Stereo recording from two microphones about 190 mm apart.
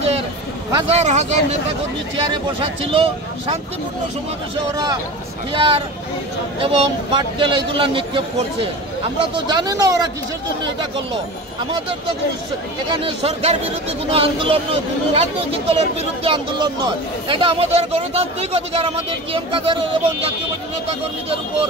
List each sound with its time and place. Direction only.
0.8 s a man's voice: 35° right (ahead or behind)
5.5 s a man's voice: 30° right (ahead or behind)
13.0 s a man's voice: 35° right (ahead or behind)